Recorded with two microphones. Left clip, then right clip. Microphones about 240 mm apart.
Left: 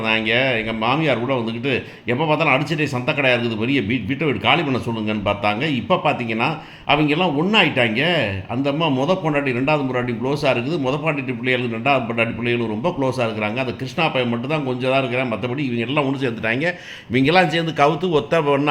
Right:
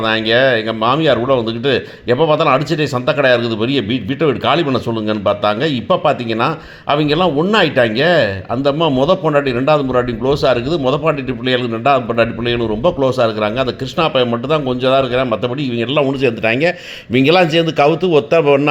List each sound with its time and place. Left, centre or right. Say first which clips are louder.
0.0 s speech: right 6 dB; right